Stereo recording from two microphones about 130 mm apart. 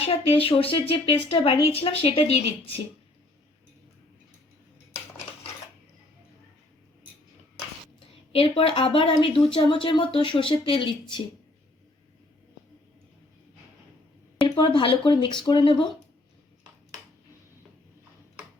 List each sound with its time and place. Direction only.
0.1 s speech: 45° left (ahead or behind)
7.9 s speech: 45° left (ahead or behind)
14.4 s speech: 40° left (ahead or behind)